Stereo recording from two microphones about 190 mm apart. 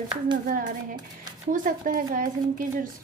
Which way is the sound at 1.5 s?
45° right (ahead or behind).